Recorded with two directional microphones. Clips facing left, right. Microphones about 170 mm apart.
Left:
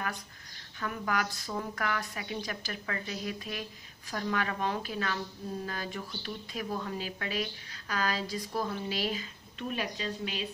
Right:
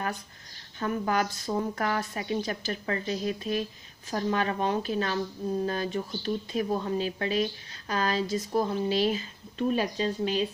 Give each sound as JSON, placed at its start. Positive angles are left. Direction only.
{"t": 0.7, "sound": "a woman's voice", "side_deg": -30}